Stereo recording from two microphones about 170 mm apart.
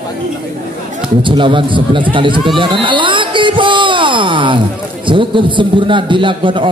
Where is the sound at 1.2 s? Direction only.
30° right (ahead or behind).